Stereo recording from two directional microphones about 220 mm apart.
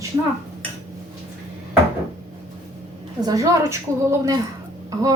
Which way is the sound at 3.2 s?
15° right (ahead or behind).